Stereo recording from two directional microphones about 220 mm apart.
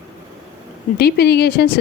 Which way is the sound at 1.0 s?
45° left (ahead or behind).